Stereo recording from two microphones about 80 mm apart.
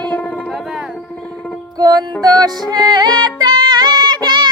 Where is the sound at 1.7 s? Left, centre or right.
Right.